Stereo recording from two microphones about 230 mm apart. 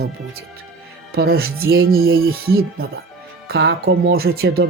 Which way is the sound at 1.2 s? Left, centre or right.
Right.